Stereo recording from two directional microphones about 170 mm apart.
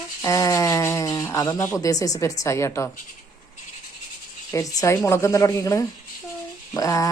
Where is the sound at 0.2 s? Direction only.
20° left (ahead or behind).